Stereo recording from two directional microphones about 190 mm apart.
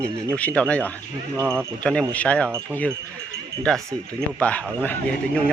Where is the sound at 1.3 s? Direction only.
15° right (ahead or behind).